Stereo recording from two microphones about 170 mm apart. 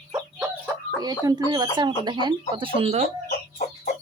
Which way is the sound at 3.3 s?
65° left (ahead or behind).